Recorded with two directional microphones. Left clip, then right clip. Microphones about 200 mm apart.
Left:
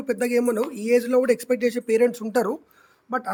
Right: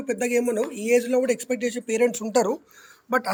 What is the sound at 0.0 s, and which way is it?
Speech, 25° left (ahead or behind).